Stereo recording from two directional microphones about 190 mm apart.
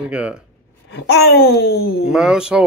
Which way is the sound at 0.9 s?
65° left (ahead or behind).